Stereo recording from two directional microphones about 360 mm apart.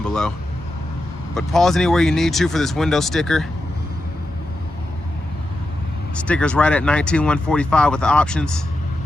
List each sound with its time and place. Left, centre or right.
0.0 s vehicle: centre
1.4 s speech: centre
6.1 s speech: centre